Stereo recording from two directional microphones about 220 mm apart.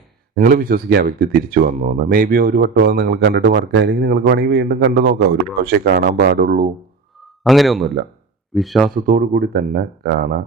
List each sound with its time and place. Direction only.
0.3 s speech: 40° right (ahead or behind)
7.4 s speech: centre (ahead or behind)
9.0 s speech: 40° right (ahead or behind)